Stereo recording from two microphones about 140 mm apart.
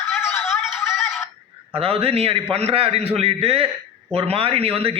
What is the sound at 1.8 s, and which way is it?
A man's voice, 45° right (ahead or behind).